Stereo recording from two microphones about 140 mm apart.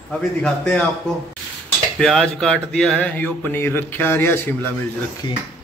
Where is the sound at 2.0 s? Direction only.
5° left (ahead or behind).